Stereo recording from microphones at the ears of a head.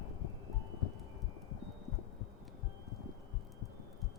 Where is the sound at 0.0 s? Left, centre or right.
Left.